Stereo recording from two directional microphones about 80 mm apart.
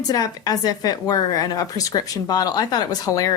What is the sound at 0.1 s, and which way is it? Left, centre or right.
Speech, left.